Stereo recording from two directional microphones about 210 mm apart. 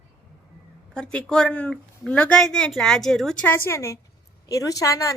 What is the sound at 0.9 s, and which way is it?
A woman's voice, 5° left (ahead or behind).